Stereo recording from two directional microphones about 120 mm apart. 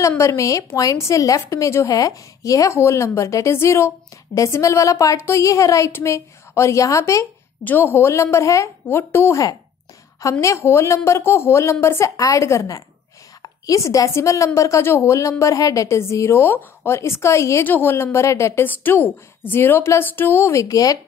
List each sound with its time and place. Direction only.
0.2 s a woman's voice: 25° left (ahead or behind)